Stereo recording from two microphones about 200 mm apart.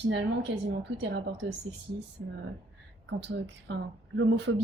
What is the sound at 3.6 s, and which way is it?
Speech, 70° right (ahead or behind).